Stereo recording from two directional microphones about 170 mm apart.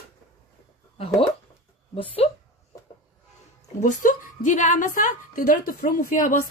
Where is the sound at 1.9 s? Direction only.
35° left (ahead or behind).